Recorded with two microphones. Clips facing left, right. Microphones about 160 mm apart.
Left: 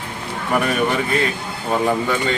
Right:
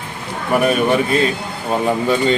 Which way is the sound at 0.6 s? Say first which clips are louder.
Right 7 dB; 20° right (ahead or behind).